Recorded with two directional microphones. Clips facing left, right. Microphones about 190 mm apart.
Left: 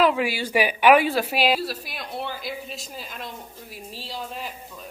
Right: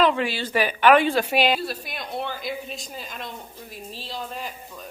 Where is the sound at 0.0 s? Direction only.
5° left (ahead or behind).